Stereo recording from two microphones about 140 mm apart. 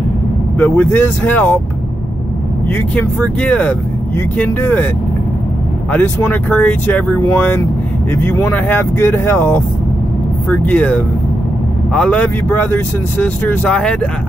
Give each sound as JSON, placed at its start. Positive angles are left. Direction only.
{"t": 0.6, "sound": "speech", "side_deg": 15}
{"t": 3.0, "sound": "speech", "side_deg": 10}
{"t": 5.9, "sound": "speech", "side_deg": 15}